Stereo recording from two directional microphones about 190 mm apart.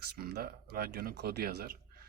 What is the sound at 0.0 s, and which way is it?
Speech, 50° right (ahead or behind).